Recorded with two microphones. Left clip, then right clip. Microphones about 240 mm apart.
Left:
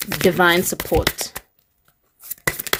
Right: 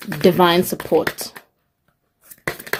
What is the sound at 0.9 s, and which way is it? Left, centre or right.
Speech, left.